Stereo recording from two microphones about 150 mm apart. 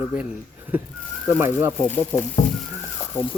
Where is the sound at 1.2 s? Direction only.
15° right (ahead or behind).